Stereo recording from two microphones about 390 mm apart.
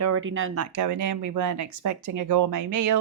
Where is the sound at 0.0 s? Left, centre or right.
Right.